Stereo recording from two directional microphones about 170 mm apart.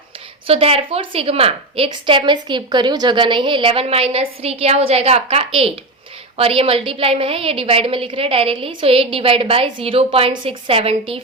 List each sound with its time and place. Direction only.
0.4 s a woman's voice: 35° right (ahead or behind)